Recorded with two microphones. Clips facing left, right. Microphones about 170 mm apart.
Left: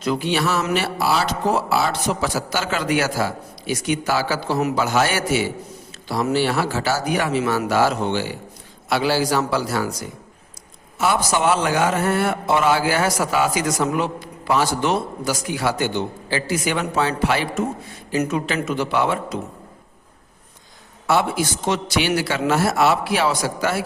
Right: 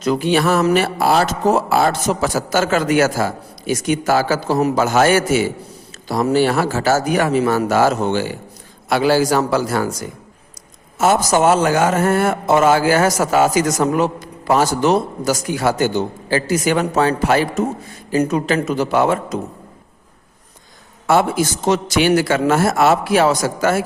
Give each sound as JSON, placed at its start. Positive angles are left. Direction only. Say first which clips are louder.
{"t": 0.0, "sound": "a man's voice", "louder": "right 5 dB", "side_deg": -45}
{"t": 10.9, "sound": "a man's voice", "louder": "right 5 dB", "side_deg": -45}
{"t": 21.1, "sound": "a man's voice", "louder": "right 4 dB", "side_deg": -45}